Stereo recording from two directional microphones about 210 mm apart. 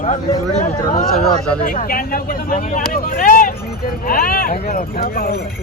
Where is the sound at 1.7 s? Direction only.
45° left (ahead or behind).